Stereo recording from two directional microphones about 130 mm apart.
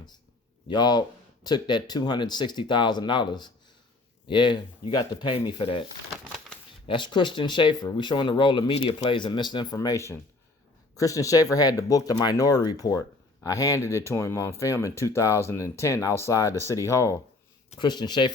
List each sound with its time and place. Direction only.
0.7 s speech: 30° left (ahead or behind)
6.8 s speech: 40° left (ahead or behind)
9.1 s speech: 35° left (ahead or behind)
9.7 s speech: 25° left (ahead or behind)
17.7 s speech: 35° left (ahead or behind)